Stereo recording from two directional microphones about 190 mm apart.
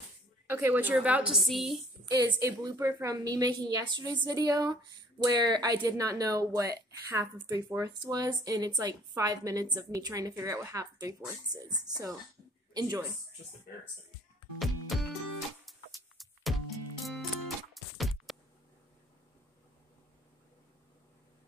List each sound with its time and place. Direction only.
0.5 s a woman's voice: 10° right (ahead or behind)
2.3 s speech: 15° right (ahead or behind)
14.6 s music: centre (ahead or behind)
16.2 s music: centre (ahead or behind)